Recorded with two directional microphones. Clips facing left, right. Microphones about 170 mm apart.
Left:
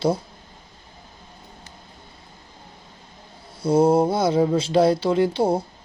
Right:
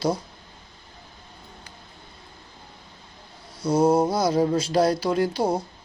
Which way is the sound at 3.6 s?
25° left (ahead or behind).